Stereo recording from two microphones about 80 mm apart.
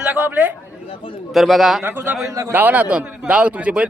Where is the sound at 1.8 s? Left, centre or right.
Right.